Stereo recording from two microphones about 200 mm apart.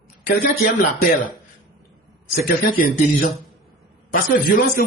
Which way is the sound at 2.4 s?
45° left (ahead or behind).